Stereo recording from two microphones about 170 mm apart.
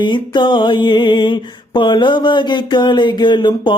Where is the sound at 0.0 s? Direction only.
25° left (ahead or behind).